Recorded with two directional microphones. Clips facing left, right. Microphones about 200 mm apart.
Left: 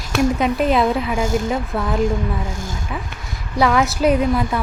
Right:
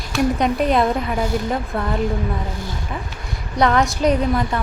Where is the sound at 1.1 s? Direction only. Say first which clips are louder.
Left 2 dB; 45° left (ahead or behind).